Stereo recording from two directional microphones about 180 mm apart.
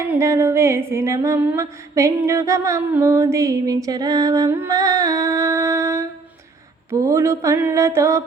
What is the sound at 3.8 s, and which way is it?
Music, 20° right (ahead or behind).